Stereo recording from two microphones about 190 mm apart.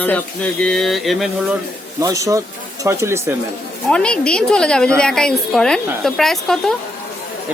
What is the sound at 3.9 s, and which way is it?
A woman's voice, 5° left (ahead or behind).